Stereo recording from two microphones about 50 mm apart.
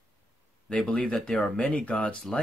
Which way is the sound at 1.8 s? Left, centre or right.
Left.